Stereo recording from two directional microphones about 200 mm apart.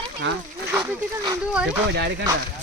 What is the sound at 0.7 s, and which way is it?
Speech, 10° right (ahead or behind).